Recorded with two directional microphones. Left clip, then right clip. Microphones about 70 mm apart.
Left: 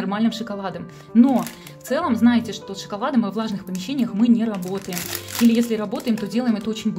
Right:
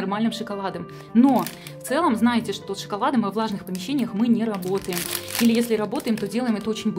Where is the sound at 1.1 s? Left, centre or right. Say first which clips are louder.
Left 1 dB; right.